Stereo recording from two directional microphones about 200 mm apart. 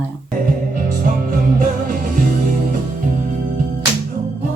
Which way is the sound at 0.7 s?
45° right (ahead or behind).